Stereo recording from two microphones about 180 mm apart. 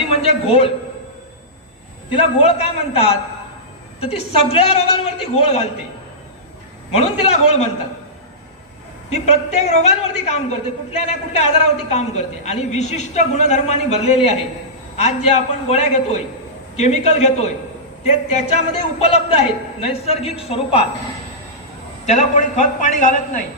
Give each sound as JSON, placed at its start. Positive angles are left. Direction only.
{"t": 0.1, "sound": "a man's voice", "side_deg": 35}
{"t": 2.1, "sound": "a man's voice", "side_deg": 35}
{"t": 6.9, "sound": "a man's voice", "side_deg": 35}
{"t": 9.0, "sound": "a man's voice", "side_deg": 35}
{"t": 22.0, "sound": "a man's voice", "side_deg": 40}